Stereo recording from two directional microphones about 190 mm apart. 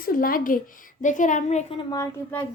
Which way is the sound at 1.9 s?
15° left (ahead or behind).